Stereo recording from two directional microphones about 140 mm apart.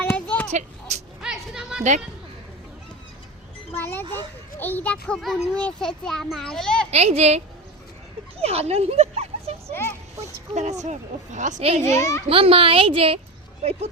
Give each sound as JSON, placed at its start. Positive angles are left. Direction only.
{"t": 0.0, "sound": "a sound", "side_deg": 10}
{"t": 0.5, "sound": "speech", "side_deg": -55}
{"t": 1.2, "sound": "a sound", "side_deg": -5}
{"t": 3.8, "sound": "a child's voice", "side_deg": 15}
{"t": 6.9, "sound": "a woman's voice", "side_deg": -50}
{"t": 11.8, "sound": "a child's voice", "side_deg": 20}
{"t": 12.3, "sound": "a woman's voice", "side_deg": -40}